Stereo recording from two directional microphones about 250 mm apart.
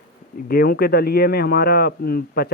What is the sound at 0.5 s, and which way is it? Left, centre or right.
Speech, left.